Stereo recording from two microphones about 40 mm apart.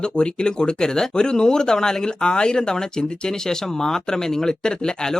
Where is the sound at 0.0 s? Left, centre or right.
Left.